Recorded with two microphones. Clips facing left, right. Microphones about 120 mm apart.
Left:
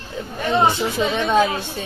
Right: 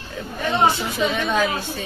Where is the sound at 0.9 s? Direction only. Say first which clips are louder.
Left 3 dB; 25° left (ahead or behind).